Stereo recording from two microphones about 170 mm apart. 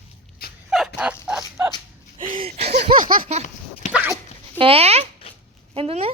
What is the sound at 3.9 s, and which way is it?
Dog, 10° right (ahead or behind).